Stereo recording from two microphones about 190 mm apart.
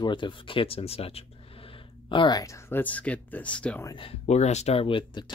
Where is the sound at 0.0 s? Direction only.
25° left (ahead or behind); by 3.8 s 5° left (ahead or behind).